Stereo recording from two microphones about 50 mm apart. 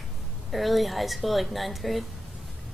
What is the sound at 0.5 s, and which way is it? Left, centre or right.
Speech, centre.